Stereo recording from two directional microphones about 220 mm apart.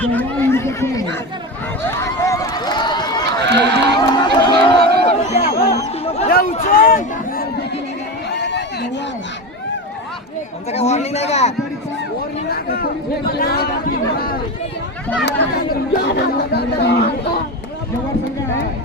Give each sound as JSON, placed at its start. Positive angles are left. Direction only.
{"t": 0.0, "sound": "speech", "side_deg": 5}
{"t": 1.8, "sound": "a sound", "side_deg": 15}
{"t": 3.2, "sound": "run", "side_deg": -50}
{"t": 3.9, "sound": "a sound", "side_deg": 20}
{"t": 5.4, "sound": "music", "side_deg": 45}
{"t": 6.2, "sound": "a sound", "side_deg": 40}
{"t": 8.3, "sound": "chatter", "side_deg": 50}
{"t": 10.7, "sound": "a man's voice", "side_deg": 30}
{"t": 12.5, "sound": "speech", "side_deg": 45}